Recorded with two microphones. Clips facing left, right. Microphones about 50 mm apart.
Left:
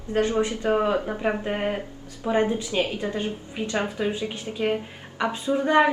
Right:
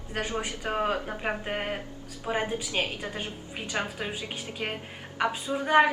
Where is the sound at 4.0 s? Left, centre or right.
Centre.